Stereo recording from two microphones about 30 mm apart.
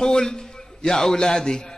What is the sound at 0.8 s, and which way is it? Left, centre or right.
Speech, centre.